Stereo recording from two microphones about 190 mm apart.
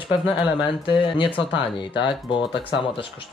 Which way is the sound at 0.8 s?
25° left (ahead or behind).